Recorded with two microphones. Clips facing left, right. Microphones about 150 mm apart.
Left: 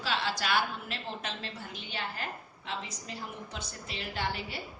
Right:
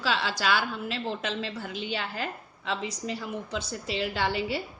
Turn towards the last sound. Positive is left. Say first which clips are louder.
# right 7 dB
turn(degrees=-90)